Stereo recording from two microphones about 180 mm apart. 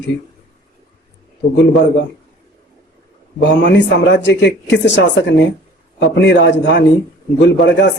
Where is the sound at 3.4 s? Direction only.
75° left (ahead or behind).